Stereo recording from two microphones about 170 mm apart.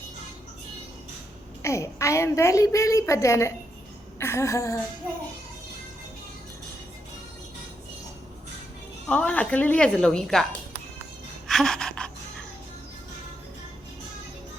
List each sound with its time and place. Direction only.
1.6 s a woman's voice: 15° left (ahead or behind)
9.0 s a woman's voice: 10° left (ahead or behind)
11.4 s gasp: centre (ahead or behind)